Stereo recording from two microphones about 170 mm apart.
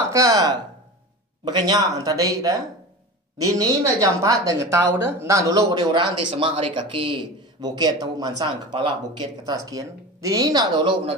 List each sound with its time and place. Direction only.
0.1 s speech: 20° right (ahead or behind)